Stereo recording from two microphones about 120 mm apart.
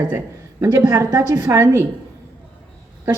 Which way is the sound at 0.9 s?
25° right (ahead or behind).